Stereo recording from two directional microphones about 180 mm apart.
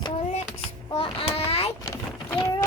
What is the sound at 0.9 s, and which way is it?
Speech, 30° left (ahead or behind).